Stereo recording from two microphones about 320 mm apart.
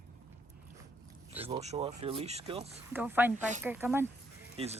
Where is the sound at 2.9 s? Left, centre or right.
Centre.